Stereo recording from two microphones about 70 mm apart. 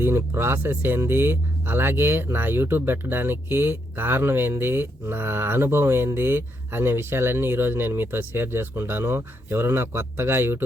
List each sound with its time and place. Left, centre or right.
0.0 s speech: right